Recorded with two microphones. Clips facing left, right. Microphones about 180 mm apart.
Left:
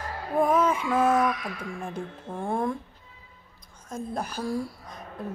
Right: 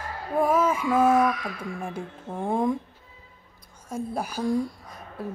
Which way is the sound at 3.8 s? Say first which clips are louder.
Right 2 dB; 10° right (ahead or behind).